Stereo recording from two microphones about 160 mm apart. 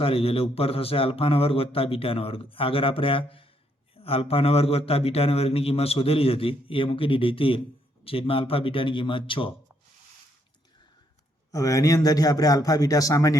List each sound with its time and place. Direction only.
0.0 s a man's voice: 35° left (ahead or behind)
11.5 s speech: 20° left (ahead or behind)